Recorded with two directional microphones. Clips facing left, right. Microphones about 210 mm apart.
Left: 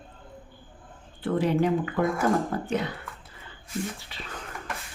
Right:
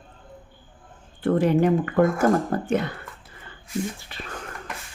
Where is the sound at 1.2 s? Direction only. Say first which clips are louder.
Right 4 dB; 50° right (ahead or behind).